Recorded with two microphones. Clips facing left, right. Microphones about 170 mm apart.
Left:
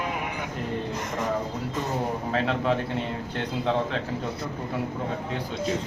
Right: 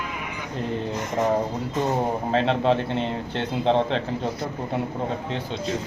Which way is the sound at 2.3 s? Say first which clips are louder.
Right 4 dB; 25° right (ahead or behind).